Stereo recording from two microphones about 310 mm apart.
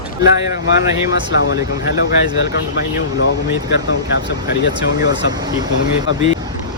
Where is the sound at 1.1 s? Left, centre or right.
Left.